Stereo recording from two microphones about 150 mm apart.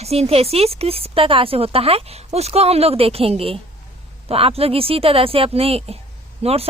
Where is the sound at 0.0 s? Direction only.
45° right (ahead or behind).